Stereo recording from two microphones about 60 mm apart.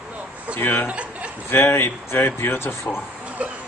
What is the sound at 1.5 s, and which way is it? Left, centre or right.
Speech, left.